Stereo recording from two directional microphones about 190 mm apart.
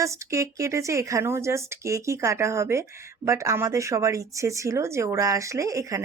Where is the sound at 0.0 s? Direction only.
15° right (ahead or behind).